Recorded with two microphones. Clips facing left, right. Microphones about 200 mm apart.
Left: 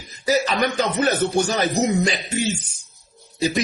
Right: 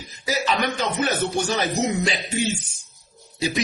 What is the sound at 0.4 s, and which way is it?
A man's voice, 40° left (ahead or behind).